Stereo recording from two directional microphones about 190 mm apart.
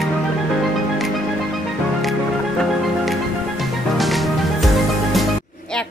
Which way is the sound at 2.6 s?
Centre (ahead or behind).